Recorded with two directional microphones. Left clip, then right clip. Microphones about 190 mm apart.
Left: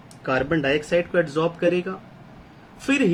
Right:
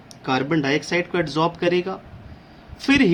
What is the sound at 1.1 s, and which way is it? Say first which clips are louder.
Speech: even; 45° right (ahead or behind).